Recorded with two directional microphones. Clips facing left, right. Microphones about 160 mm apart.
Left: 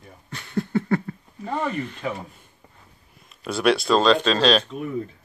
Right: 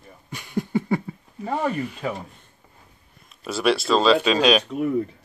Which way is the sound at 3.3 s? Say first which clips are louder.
Left 1 dB; centre (ahead or behind).